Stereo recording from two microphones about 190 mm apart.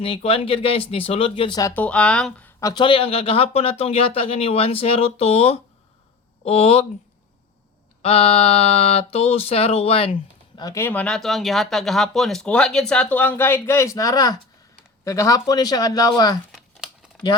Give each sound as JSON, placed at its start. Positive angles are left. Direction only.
{"t": 0.0, "sound": "speech", "side_deg": 30}
{"t": 1.7, "sound": "speech", "side_deg": 5}
{"t": 2.6, "sound": "speech", "side_deg": 20}
{"t": 8.0, "sound": "speech", "side_deg": 30}
{"t": 10.6, "sound": "speech", "side_deg": 15}
{"t": 16.5, "sound": "crumpling", "side_deg": -5}